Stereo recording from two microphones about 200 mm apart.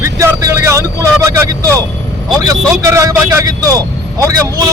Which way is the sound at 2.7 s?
15° right (ahead or behind).